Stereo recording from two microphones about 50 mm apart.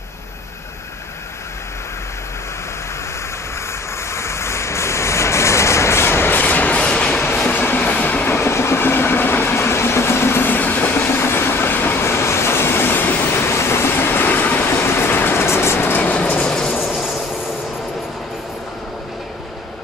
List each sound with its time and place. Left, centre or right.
4.1 s vehicle: left
6.4 s train: left
7.5 s train: left
8.3 s train: left
14.7 s vehicle: left
15.4 s vehicle: left
16.0 s vehicle: left
16.8 s vehicle: centre